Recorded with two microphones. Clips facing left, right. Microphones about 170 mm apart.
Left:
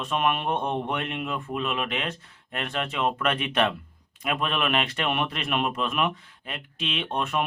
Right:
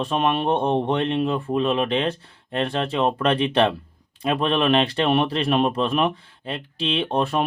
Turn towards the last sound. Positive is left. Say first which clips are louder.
# right 6 dB
turn(degrees=-30)  # may be behind; listen again after turning